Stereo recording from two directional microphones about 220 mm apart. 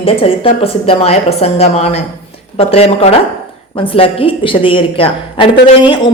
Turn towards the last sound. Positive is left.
turn(degrees=20)  # may be behind; listen again after turning